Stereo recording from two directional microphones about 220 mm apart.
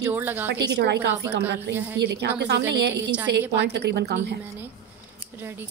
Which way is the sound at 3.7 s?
50° right (ahead or behind).